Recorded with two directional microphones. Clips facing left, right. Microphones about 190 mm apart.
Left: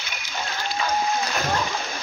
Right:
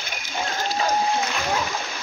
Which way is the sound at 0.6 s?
40° right (ahead or behind).